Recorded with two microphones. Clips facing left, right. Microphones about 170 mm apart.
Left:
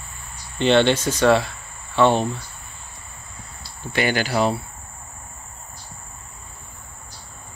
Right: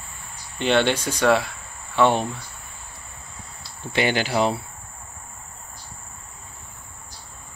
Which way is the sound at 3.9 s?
20° right (ahead or behind).